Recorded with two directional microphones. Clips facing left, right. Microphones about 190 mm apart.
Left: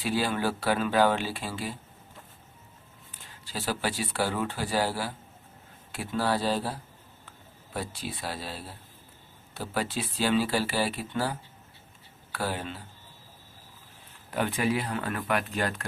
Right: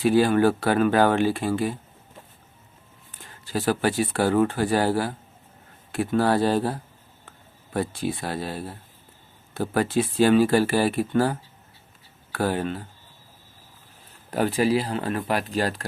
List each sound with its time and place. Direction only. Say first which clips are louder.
0.0 s speech: right 10 dB; 50° right (ahead or behind)
3.2 s speech: right 9 dB; 50° right (ahead or behind)
14.3 s speech: right 6 dB; 40° right (ahead or behind)